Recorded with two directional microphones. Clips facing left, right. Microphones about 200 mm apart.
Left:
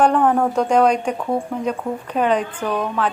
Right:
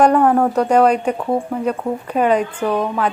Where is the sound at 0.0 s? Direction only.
10° right (ahead or behind).